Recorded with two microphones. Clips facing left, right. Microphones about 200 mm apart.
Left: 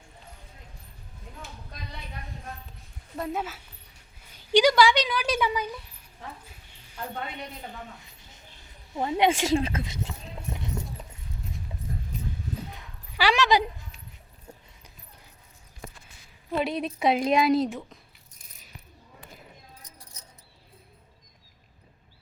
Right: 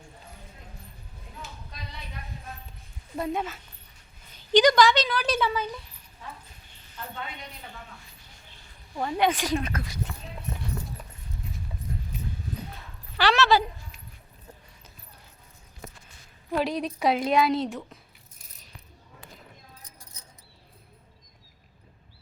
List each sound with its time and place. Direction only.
3.2 s a woman's voice: centre (ahead or behind)
9.0 s a woman's voice: 20° left (ahead or behind)
12.7 s dog: 10° left (ahead or behind)
16.6 s a woman's voice: centre (ahead or behind)